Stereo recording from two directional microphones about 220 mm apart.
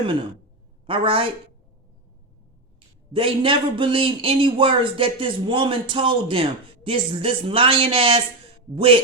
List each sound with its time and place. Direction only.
0.9 s a man's voice: 25° right (ahead or behind)
3.1 s a man's voice: 25° right (ahead or behind)